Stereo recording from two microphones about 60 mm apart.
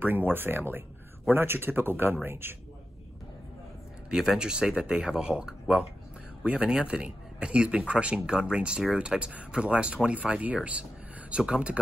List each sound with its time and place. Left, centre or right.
0.0 s speech: right
4.1 s a man's voice: centre